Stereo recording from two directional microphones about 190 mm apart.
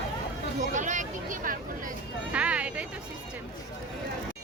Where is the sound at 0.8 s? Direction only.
40° right (ahead or behind).